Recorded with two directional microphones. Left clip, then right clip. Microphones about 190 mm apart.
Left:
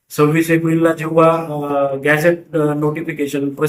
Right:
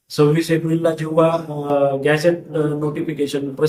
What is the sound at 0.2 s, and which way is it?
Speech, 10° right (ahead or behind).